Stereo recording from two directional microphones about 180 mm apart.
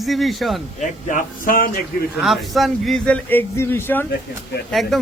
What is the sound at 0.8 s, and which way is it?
Speech, 45° left (ahead or behind).